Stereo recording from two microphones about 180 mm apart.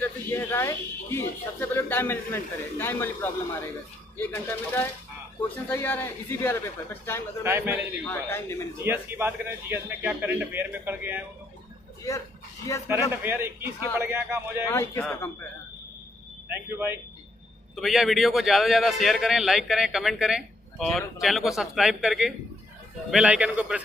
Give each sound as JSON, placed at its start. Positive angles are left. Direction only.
{"t": 0.0, "sound": "a man's voice", "side_deg": 10}
{"t": 7.4, "sound": "a man's voice", "side_deg": -15}
{"t": 8.1, "sound": "a man's voice", "side_deg": 15}
{"t": 8.8, "sound": "a man's voice", "side_deg": -10}
{"t": 12.7, "sound": "a man's voice", "side_deg": 20}
{"t": 13.1, "sound": "a man's voice", "side_deg": -10}
{"t": 14.7, "sound": "a man's voice", "side_deg": 15}
{"t": 16.4, "sound": "a man's voice", "side_deg": -10}
{"t": 17.7, "sound": "a man's voice", "side_deg": 0}